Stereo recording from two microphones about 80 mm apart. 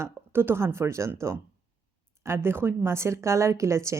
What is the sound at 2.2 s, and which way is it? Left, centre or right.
A woman's voice, right.